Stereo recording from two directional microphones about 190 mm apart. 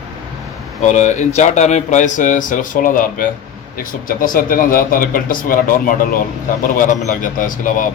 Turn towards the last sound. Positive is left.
turn(degrees=45)  # may be behind; listen again after turning